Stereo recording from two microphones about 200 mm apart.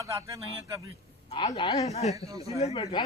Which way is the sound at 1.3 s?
25° left (ahead or behind).